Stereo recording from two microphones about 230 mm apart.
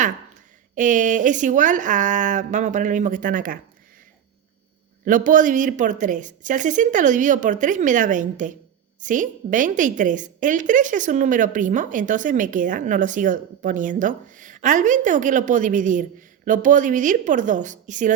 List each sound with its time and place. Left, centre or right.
0.8 s a woman's voice: right
5.0 s a woman's voice: right